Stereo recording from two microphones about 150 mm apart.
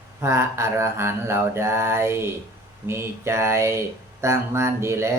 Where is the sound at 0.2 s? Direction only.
20° right (ahead or behind).